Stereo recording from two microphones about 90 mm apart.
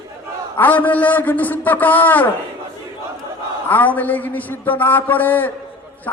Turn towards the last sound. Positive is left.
turn(degrees=20)  # may be behind; listen again after turning